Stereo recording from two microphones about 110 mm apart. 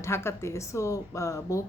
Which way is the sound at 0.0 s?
25° left (ahead or behind).